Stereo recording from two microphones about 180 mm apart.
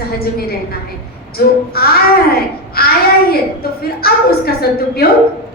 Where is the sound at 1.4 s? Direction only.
60° left (ahead or behind).